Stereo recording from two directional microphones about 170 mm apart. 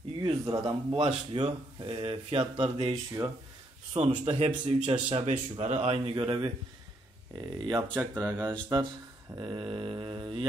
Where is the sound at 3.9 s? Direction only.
35° right (ahead or behind).